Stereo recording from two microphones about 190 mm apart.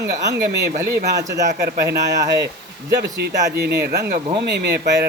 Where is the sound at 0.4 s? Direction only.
60° right (ahead or behind).